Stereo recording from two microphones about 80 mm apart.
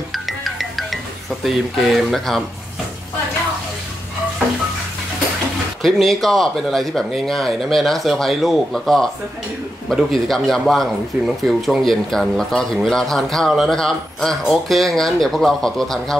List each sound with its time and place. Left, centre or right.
0.1 s music: centre
1.4 s speech: centre
5.8 s speech: centre